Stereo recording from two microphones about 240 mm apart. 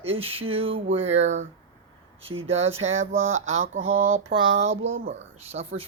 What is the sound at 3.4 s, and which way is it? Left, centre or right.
Speech, right.